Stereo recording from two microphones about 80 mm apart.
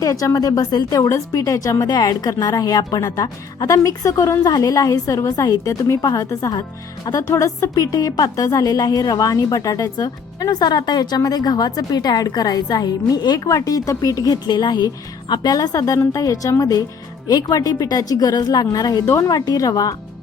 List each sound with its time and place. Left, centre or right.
0.0 s a woman's voice: left
15.3 s a woman's voice: left
19.0 s a woman's voice: left